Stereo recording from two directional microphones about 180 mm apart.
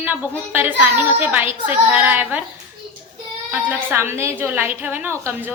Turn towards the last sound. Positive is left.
turn(degrees=-10)  # may be behind; listen again after turning